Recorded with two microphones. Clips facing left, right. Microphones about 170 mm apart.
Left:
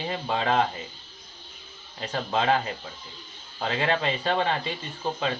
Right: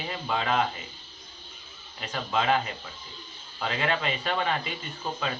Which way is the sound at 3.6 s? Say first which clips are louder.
Left 3 dB; 30° left (ahead or behind).